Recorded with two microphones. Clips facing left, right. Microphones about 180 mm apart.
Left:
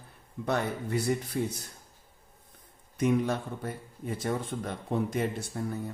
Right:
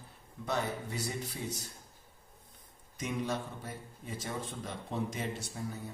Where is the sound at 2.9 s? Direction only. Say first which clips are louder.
Left 8 dB; 55° left (ahead or behind).